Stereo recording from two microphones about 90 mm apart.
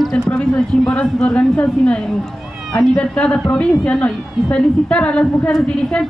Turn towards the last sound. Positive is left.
turn(degrees=10)  # may be behind; listen again after turning